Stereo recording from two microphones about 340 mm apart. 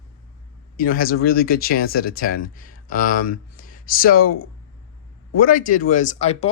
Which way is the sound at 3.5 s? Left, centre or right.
Left.